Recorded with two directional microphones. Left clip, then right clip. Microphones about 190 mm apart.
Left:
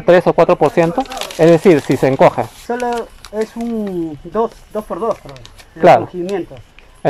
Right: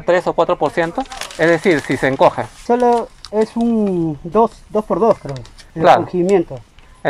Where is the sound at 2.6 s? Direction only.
15° right (ahead or behind).